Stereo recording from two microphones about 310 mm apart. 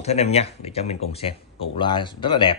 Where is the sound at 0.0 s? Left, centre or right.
Centre.